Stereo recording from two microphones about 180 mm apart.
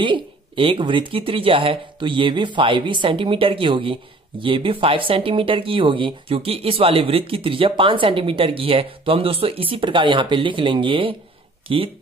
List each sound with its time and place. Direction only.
0.0 s speech: 30° right (ahead or behind)